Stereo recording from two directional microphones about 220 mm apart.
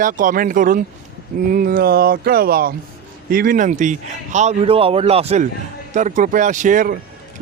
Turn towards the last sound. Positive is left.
turn(degrees=-35)  # may be behind; listen again after turning